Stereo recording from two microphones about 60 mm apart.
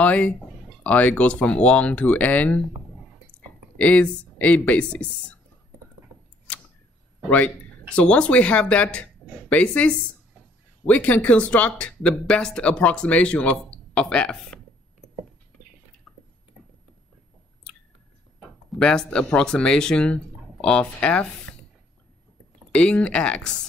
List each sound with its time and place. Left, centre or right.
0.0 s speech: left
3.7 s speech: left
7.2 s speech: left
18.8 s speech: centre
22.7 s speech: centre